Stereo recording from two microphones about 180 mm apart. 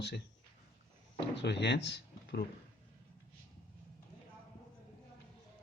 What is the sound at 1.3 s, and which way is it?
Speech, 70° left (ahead or behind).